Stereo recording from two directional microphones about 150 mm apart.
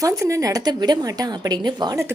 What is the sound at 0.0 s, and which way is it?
A woman's voice, 20° right (ahead or behind).